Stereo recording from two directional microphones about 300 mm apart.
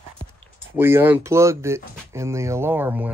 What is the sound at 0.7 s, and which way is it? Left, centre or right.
Speech, centre.